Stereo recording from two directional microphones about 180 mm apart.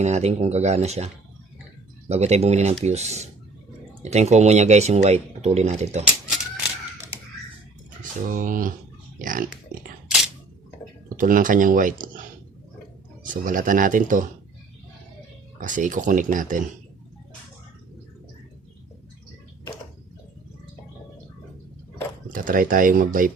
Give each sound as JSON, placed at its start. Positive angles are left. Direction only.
{"t": 0.0, "sound": "speech", "side_deg": -40}
{"t": 8.3, "sound": "speech", "side_deg": -50}
{"t": 9.1, "sound": "pig", "side_deg": -50}
{"t": 11.2, "sound": "speech", "side_deg": -50}
{"t": 13.2, "sound": "speech", "side_deg": -50}
{"t": 15.6, "sound": "speech", "side_deg": -45}
{"t": 22.3, "sound": "speech", "side_deg": -50}